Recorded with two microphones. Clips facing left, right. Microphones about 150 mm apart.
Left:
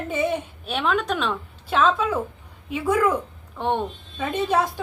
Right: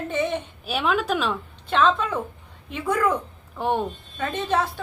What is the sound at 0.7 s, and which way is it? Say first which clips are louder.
A woman's voice: even; 5° right (ahead or behind).